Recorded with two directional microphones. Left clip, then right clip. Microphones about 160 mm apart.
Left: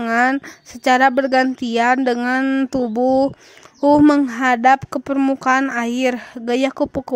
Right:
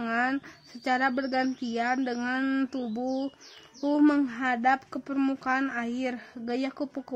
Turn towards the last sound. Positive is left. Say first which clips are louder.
# left 14 dB
turn(degrees=50)  # may be behind; listen again after turning